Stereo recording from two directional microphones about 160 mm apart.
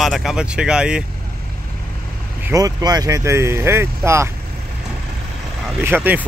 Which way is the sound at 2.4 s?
20° right (ahead or behind).